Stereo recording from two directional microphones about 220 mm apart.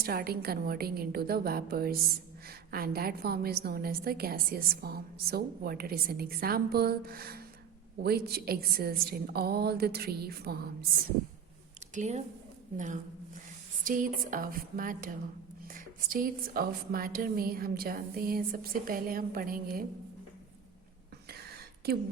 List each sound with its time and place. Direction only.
0.0 s a woman's voice: 45° right (ahead or behind)
11.9 s speech: 30° right (ahead or behind)